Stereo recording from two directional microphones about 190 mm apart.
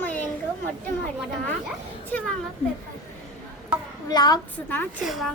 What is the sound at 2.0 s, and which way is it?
Speech, 10° left (ahead or behind).